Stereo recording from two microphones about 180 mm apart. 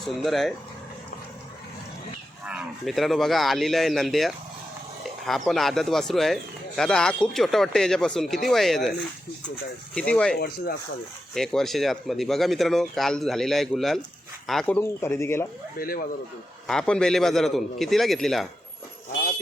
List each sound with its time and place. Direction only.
0.0 s speech: centre (ahead or behind)
2.4 s speech: 5° right (ahead or behind)
10.3 s speech: 60° left (ahead or behind)
11.3 s speech: centre (ahead or behind)
15.8 s speech: 55° left (ahead or behind)
16.6 s speech: 5° left (ahead or behind)